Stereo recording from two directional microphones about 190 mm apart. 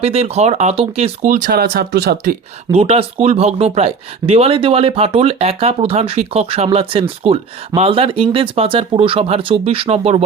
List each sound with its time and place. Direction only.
0.0 s speech: 35° right (ahead or behind); by 2.3 s 55° right (ahead or behind)
2.7 s speech: 30° right (ahead or behind)